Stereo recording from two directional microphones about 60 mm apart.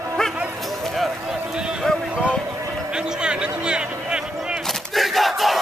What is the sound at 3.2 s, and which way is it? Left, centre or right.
Music, centre.